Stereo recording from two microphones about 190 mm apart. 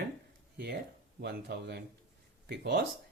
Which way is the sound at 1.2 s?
60° right (ahead or behind).